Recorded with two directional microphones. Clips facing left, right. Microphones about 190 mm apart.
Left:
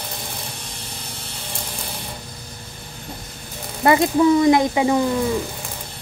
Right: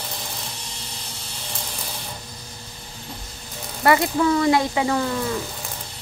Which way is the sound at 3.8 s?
20° left (ahead or behind).